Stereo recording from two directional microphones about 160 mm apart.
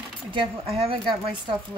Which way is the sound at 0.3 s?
35° right (ahead or behind).